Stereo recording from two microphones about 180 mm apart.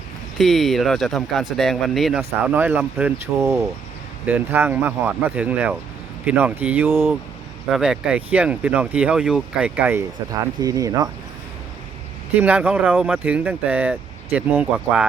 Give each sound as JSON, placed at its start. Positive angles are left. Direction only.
{"t": 0.3, "sound": "speech", "side_deg": 0}
{"t": 10.6, "sound": "speech", "side_deg": -20}
{"t": 12.3, "sound": "speech", "side_deg": -10}